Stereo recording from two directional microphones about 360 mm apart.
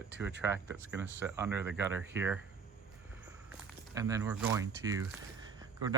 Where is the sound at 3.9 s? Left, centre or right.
Centre.